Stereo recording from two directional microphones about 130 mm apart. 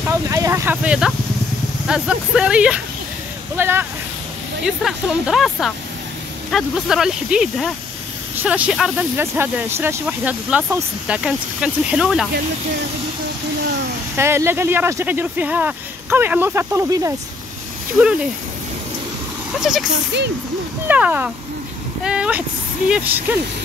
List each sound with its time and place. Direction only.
0.1 s speech: 20° right (ahead or behind)
0.8 s speech: 5° right (ahead or behind)
4.6 s speech: 5° right (ahead or behind)
9.1 s speech: 15° right (ahead or behind)
14.1 s speech: 20° right (ahead or behind)
19.6 s speech: 5° right (ahead or behind)
22.0 s a sound: 5° right (ahead or behind)
22.8 s speech: 10° right (ahead or behind)